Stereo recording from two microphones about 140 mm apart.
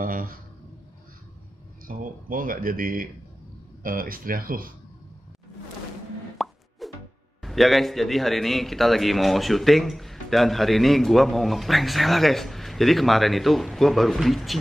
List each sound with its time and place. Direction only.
0.0 s speech: 80° right
1.9 s speech: 80° right
6.3 s plop: centre (ahead or behind)
7.4 s a man's voice: centre (ahead or behind)